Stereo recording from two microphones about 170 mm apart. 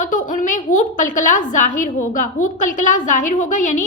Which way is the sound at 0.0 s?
50° left (ahead or behind).